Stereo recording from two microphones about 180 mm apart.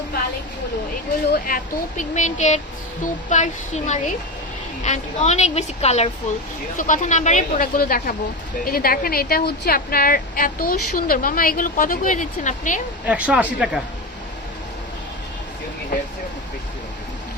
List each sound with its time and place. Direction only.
1.3 s a woman's voice: 50° left (ahead or behind)
13.1 s speech: 5° right (ahead or behind)